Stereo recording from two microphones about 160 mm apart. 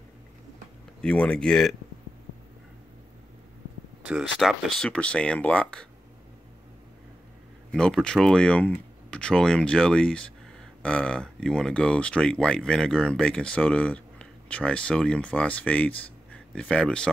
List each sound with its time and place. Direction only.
1.0 s speech: 5° left (ahead or behind)
4.1 s speech: 5° right (ahead or behind)
7.7 s speech: 5° left (ahead or behind)